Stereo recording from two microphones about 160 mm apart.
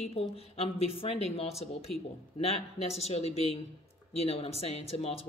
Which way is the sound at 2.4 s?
40° left (ahead or behind).